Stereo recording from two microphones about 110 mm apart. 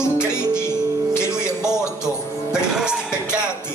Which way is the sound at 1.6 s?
5° right (ahead or behind).